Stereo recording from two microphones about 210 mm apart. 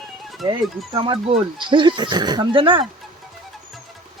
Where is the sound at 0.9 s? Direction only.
25° right (ahead or behind).